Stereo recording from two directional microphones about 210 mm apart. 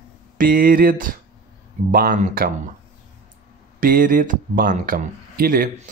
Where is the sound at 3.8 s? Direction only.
40° right (ahead or behind).